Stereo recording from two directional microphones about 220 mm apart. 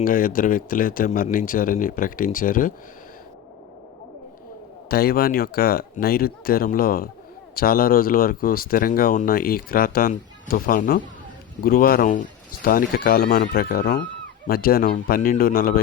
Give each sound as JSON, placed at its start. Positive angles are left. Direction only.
{"t": 0.0, "sound": "speech", "side_deg": 40}
{"t": 4.9, "sound": "speech", "side_deg": 45}